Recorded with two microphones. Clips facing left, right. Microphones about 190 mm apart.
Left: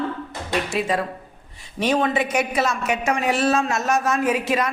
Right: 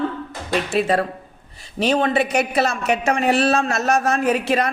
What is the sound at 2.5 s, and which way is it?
Speech, 30° right (ahead or behind).